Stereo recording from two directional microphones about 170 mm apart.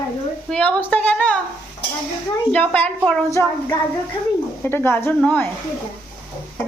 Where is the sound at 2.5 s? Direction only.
10° left (ahead or behind).